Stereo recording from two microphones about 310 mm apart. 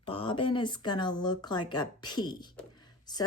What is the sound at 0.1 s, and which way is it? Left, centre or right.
A woman's voice, centre.